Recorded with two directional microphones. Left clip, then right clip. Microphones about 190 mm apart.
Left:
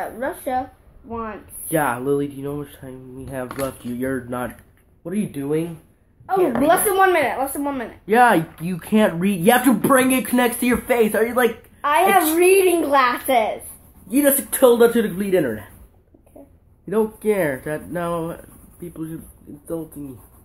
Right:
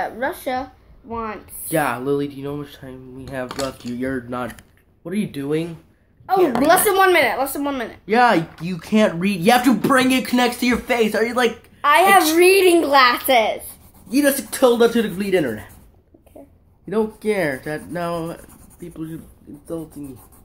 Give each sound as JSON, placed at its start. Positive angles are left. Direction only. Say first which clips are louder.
{"t": 0.0, "sound": "a woman's voice", "louder": "right 2 dB", "side_deg": -25}
{"t": 1.7, "sound": "speech", "louder": "even", "side_deg": 10}
{"t": 6.6, "sound": "a woman's voice", "louder": "right 1 dB", "side_deg": -25}
{"t": 8.0, "sound": "speech", "louder": "left 1 dB", "side_deg": 15}
{"t": 11.8, "sound": "a woman's voice", "louder": "right 3 dB", "side_deg": -20}
{"t": 14.0, "sound": "speech", "louder": "even", "side_deg": 15}
{"t": 16.8, "sound": "speech", "louder": "left 1 dB", "side_deg": 15}